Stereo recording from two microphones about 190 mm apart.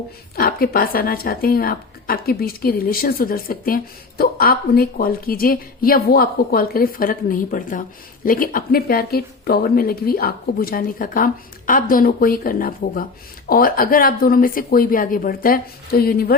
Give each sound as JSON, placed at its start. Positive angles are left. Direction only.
{"t": 0.3, "sound": "a woman's voice", "side_deg": 50}